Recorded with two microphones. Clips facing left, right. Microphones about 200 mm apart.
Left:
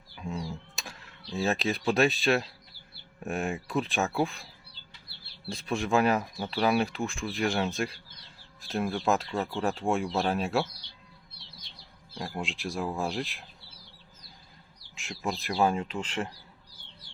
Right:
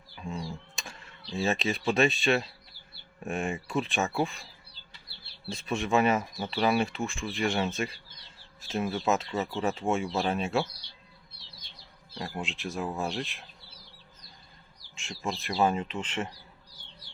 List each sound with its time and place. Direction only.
0.2 s a sound: centre (ahead or behind)
3.2 s speech: centre (ahead or behind)
5.5 s speech: centre (ahead or behind)
12.1 s speech: centre (ahead or behind)
14.9 s speech: centre (ahead or behind)